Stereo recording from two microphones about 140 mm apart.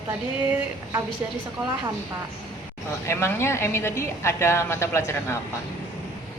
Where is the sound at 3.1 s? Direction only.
20° left (ahead or behind).